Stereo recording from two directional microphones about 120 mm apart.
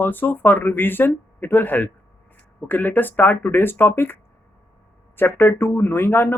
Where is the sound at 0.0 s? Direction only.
15° left (ahead or behind).